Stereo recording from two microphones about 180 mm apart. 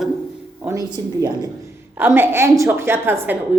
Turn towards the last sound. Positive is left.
turn(degrees=-15)  # may be behind; listen again after turning